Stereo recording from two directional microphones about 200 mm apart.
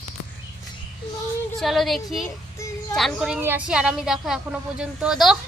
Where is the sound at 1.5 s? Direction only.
Centre (ahead or behind).